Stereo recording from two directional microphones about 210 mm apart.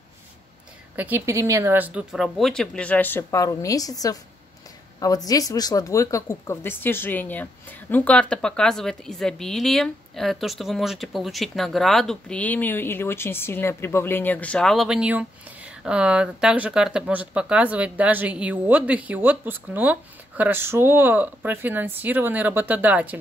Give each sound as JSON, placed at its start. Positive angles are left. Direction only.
{"t": 0.9, "sound": "speech", "side_deg": -10}
{"t": 5.0, "sound": "speech", "side_deg": 15}